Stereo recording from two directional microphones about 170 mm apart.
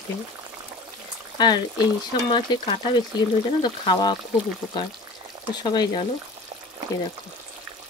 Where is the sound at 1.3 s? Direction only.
25° left (ahead or behind).